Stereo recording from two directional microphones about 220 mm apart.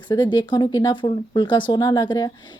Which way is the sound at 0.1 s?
20° left (ahead or behind).